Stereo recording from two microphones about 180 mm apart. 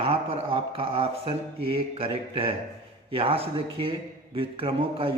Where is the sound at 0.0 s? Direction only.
30° right (ahead or behind).